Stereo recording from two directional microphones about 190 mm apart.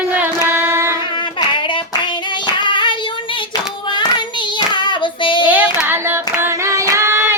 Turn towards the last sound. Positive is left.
turn(degrees=-10)  # may be behind; listen again after turning